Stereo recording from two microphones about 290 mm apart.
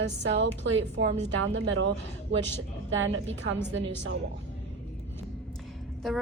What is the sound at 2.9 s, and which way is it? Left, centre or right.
A woman's voice, right.